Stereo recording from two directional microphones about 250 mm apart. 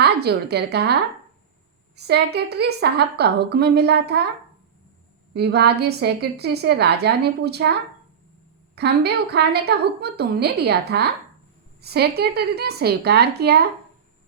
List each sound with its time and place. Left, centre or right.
0.0 s a woman's voice: right
2.0 s a woman's voice: right
5.3 s a woman's voice: right